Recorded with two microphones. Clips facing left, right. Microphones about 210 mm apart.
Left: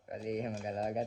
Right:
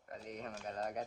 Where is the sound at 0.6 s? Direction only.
10° left (ahead or behind).